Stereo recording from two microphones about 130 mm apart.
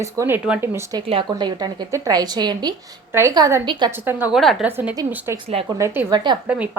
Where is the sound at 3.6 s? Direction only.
35° right (ahead or behind).